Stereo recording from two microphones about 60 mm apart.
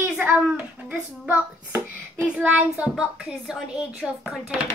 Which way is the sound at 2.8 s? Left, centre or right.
Centre.